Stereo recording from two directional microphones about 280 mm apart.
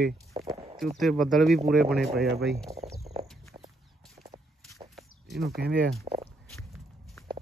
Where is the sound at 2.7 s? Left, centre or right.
Centre.